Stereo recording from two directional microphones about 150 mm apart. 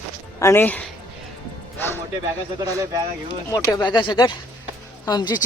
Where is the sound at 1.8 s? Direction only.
15° left (ahead or behind).